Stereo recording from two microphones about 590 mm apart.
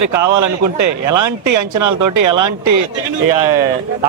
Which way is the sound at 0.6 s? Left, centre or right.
Right.